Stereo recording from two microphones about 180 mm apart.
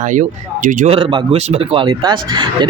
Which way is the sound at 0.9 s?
30° right (ahead or behind).